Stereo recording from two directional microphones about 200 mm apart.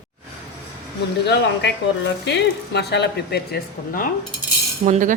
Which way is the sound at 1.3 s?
60° left (ahead or behind).